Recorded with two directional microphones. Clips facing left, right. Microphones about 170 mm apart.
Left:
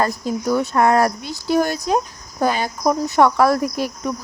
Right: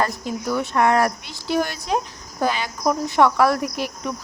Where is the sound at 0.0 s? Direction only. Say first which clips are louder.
Left 3 dB; 40° left (ahead or behind).